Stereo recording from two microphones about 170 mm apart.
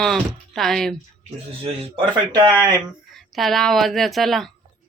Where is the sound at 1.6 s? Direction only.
30° right (ahead or behind).